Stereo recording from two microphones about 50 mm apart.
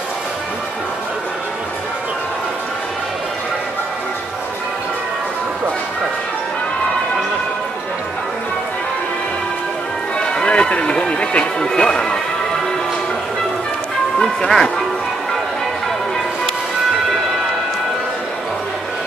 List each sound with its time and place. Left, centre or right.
10.1 s music: centre
14.1 s music: centre